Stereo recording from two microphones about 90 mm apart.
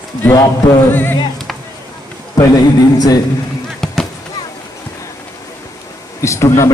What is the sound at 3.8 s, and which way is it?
Fireworks, 5° left (ahead or behind).